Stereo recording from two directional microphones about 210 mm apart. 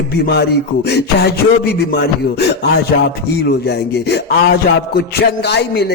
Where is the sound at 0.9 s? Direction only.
55° left (ahead or behind).